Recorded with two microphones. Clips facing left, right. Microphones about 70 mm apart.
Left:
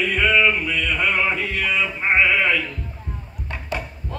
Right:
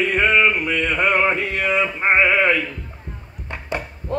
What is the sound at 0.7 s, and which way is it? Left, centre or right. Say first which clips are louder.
Male singing: right 3 dB; right.